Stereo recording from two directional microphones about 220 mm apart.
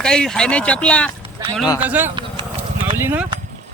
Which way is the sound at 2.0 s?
20° right (ahead or behind).